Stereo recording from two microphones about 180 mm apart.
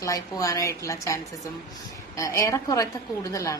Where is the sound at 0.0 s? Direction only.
20° left (ahead or behind).